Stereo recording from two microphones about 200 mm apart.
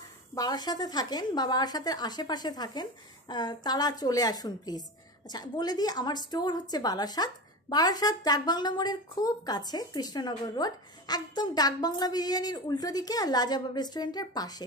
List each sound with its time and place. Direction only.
0.3 s speech: 20° left (ahead or behind)